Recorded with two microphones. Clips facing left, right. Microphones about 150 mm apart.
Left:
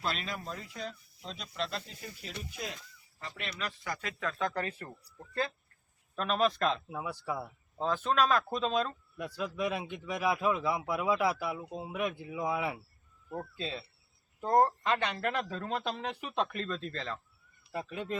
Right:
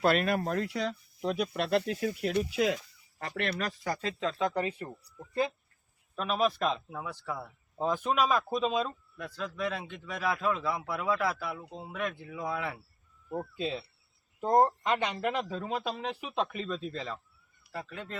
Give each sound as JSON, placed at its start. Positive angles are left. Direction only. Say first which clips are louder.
{"t": 0.0, "sound": "speech", "louder": "right 10 dB", "side_deg": -60}
{"t": 3.2, "sound": "speech", "louder": "right 9 dB", "side_deg": -65}
{"t": 3.6, "sound": "speech", "louder": "right 5 dB", "side_deg": -35}
{"t": 4.2, "sound": "speech", "louder": "right 3 dB", "side_deg": -20}
{"t": 6.1, "sound": "speech", "louder": "even", "side_deg": -5}
{"t": 6.8, "sound": "a man's voice", "louder": "left 1 dB", "side_deg": 10}
{"t": 7.8, "sound": "speech", "louder": "right 1 dB", "side_deg": -10}
{"t": 9.1, "sound": "a man's voice", "louder": "left 3 dB", "side_deg": 10}
{"t": 13.3, "sound": "speech", "louder": "right 4 dB", "side_deg": -15}
{"t": 17.7, "sound": "a man's voice", "louder": "left 4 dB", "side_deg": 15}